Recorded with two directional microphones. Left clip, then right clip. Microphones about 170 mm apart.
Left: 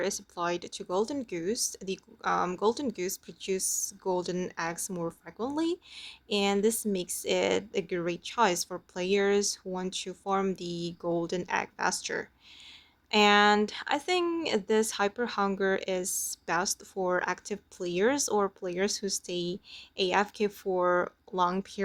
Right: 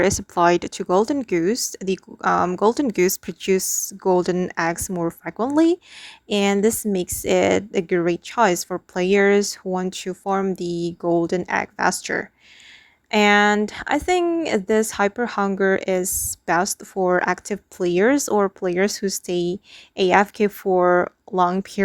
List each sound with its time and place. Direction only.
0.0 s a woman's voice: 55° right (ahead or behind)